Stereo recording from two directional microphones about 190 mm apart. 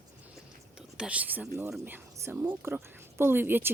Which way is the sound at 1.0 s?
5° right (ahead or behind).